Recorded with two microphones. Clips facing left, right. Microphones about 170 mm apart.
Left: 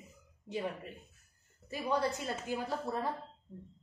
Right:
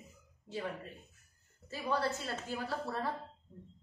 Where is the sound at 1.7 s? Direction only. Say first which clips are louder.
Left 2 dB; 15° left (ahead or behind).